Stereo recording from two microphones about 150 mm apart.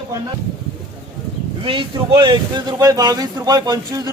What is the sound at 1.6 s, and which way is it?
Speech, 35° right (ahead or behind).